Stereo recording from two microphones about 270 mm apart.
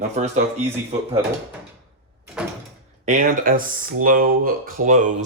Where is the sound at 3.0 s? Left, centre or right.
Right.